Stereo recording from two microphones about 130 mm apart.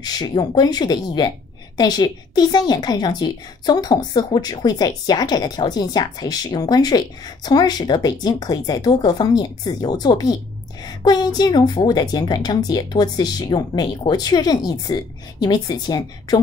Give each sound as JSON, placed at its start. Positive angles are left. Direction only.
{"t": 0.0, "sound": "a woman's voice", "side_deg": 30}